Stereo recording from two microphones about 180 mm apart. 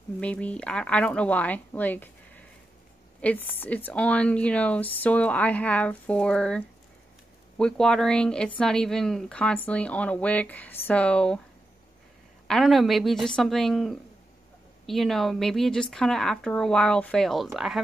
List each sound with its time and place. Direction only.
0.2 s a woman's voice: 5° left (ahead or behind)
12.4 s a woman's voice: centre (ahead or behind)